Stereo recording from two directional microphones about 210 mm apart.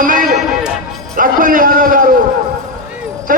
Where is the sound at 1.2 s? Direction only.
40° right (ahead or behind).